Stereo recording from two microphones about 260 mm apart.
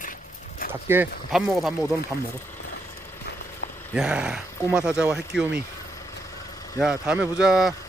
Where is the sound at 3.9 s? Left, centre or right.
Centre.